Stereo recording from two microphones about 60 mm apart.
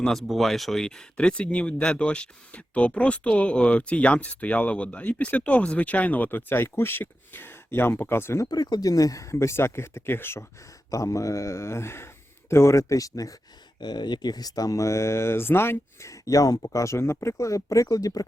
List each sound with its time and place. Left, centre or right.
0.1 s speech: centre; by 8.4 s left
8.4 s speech: left
10.9 s speech: left
14.3 s speech: left
16.0 s speech: left